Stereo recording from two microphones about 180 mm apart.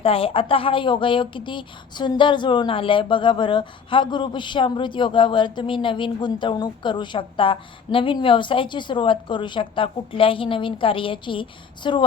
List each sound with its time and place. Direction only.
0.0 s a woman's voice: 30° left (ahead or behind)